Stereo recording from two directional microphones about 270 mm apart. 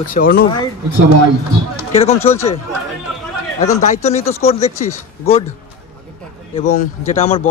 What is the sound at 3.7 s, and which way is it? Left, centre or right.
Speech, left.